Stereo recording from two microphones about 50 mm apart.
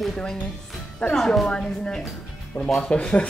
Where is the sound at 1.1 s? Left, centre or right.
Centre.